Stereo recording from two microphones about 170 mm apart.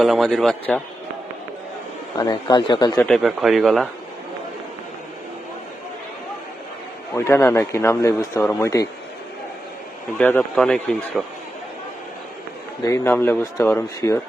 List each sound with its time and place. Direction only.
0.0 s a man's voice: centre (ahead or behind)
2.1 s speech: 25° left (ahead or behind)
3.1 s a man's voice: centre (ahead or behind)
7.3 s speech: 15° left (ahead or behind)
10.2 s a man's voice: 10° left (ahead or behind)
12.8 s speech: 15° left (ahead or behind)